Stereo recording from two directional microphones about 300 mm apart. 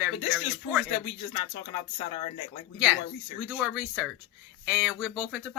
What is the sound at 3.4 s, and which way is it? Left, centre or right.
Speech, centre.